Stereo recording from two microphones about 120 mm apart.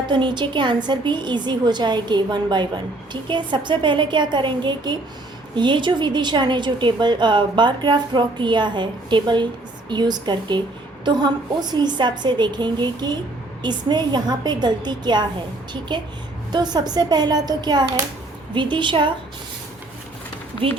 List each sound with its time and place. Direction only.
0.1 s a woman's voice: 40° right (ahead or behind)
16.5 s a woman's voice: 35° right (ahead or behind)
20.6 s a woman's voice: 50° right (ahead or behind)